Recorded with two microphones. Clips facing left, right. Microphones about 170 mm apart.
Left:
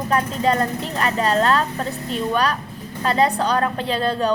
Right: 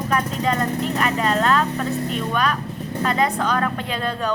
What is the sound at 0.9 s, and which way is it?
Speech, 35° left (ahead or behind).